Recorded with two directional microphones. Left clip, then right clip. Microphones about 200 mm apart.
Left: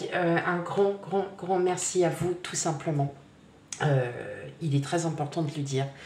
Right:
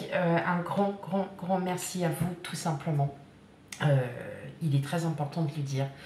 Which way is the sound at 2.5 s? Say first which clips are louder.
Left 4 dB; 35° left (ahead or behind).